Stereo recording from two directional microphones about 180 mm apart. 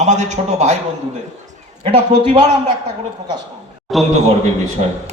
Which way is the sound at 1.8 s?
30° right (ahead or behind).